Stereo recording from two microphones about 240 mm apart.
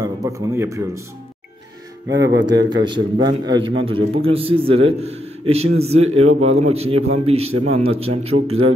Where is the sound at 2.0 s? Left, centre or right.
Right.